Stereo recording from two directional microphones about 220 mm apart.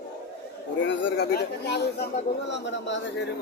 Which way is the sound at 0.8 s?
55° left (ahead or behind).